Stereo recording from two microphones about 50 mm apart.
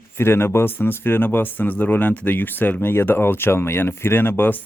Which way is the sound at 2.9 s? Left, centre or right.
Left.